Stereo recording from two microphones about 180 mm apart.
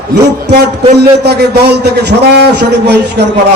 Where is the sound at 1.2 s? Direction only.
65° right (ahead or behind).